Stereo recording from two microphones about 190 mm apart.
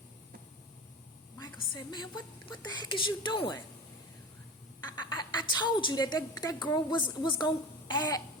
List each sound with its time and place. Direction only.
1.4 s a woman's voice: 20° left (ahead or behind)
4.9 s a woman's voice: 25° left (ahead or behind)